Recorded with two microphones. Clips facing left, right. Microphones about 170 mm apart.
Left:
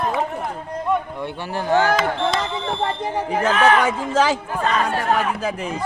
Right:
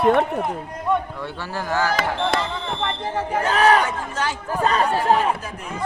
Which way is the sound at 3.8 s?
90° left.